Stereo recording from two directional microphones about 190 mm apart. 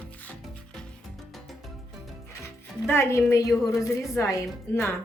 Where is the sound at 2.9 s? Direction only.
15° left (ahead or behind).